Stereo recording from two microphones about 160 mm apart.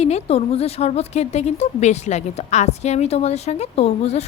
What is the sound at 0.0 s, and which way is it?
A woman's voice, 40° left (ahead or behind).